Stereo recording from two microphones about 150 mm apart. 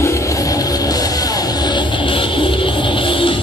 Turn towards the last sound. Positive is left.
turn(degrees=35)  # may be behind; listen again after turning